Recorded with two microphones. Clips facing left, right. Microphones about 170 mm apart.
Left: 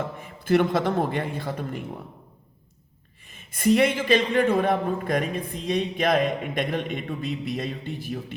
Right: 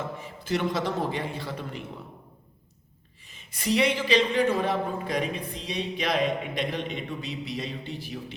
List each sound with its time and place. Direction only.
0.2 s speech: 55° left (ahead or behind)
3.2 s speech: 50° left (ahead or behind)